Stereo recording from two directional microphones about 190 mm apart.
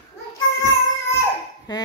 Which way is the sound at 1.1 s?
20° left (ahead or behind).